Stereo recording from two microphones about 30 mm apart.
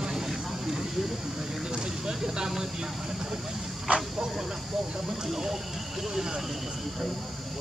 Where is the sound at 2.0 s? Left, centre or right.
Right.